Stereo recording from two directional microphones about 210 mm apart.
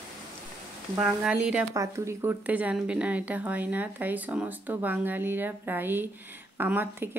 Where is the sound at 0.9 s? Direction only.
5° right (ahead or behind).